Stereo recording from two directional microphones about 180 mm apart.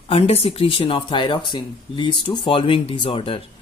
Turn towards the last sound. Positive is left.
turn(degrees=30)  # may be behind; listen again after turning